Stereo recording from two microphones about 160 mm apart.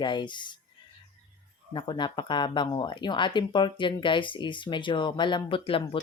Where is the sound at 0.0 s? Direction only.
30° left (ahead or behind).